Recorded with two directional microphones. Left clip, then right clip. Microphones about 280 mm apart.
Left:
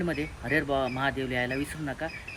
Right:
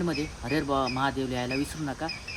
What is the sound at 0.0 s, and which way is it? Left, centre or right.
Speech, centre.